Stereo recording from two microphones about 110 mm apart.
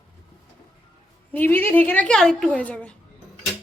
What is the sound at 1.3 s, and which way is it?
A woman's voice, 20° left (ahead or behind).